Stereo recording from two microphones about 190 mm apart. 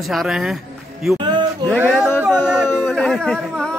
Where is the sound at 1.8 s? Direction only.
5° right (ahead or behind).